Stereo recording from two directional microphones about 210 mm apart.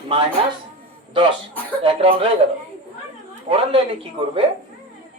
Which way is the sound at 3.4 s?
25° right (ahead or behind).